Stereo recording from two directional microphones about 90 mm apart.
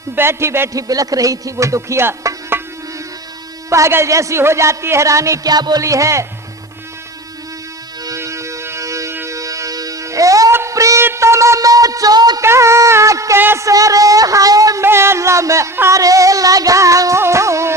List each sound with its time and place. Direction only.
0.2 s a man's voice: 30° right (ahead or behind)
0.7 s a man's voice: 40° right (ahead or behind)
3.7 s a man's voice: 30° right (ahead or behind); by 5.8 s 50° right (ahead or behind)
5.8 s a man's voice: 35° right (ahead or behind)
8.0 s music: 35° right (ahead or behind)
10.5 s a sound: 30° right (ahead or behind)
11.0 s music: 30° right (ahead or behind); by 12.4 s 45° right (ahead or behind)
12.4 s a sound: 30° right (ahead or behind)
13.4 s a man's voice: 25° right (ahead or behind)
13.7 s a man's voice: 40° right (ahead or behind)
14.8 s a man's voice: 30° right (ahead or behind)
16.0 s music: 40° right (ahead or behind)